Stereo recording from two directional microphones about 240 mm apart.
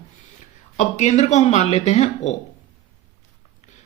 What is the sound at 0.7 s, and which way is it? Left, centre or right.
Speech, left.